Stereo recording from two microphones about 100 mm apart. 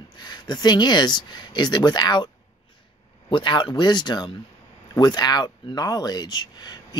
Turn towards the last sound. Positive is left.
turn(degrees=45)  # may be behind; listen again after turning